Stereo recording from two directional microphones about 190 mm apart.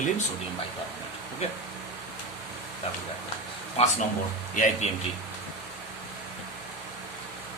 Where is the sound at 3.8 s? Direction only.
30° left (ahead or behind).